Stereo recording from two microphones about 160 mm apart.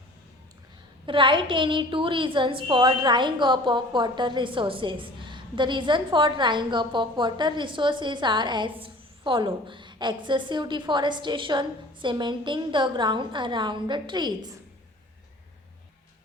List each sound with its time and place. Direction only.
1.0 s a woman's voice: 30° right (ahead or behind)